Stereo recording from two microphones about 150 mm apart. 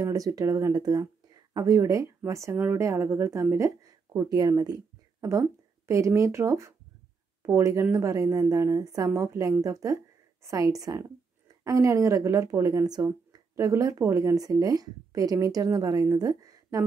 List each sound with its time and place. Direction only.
0.0 s a woman's voice: 20° right (ahead or behind)